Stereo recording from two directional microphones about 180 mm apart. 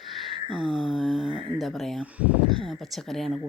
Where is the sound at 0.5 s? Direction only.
5° right (ahead or behind).